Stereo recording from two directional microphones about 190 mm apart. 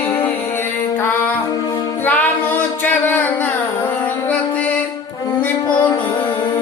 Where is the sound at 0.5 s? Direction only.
10° left (ahead or behind).